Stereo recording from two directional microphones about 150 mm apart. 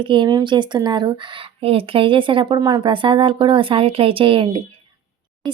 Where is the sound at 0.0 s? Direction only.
35° right (ahead or behind).